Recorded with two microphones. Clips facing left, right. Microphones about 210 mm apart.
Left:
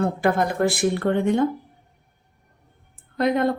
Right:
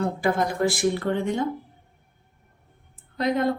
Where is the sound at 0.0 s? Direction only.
55° left (ahead or behind).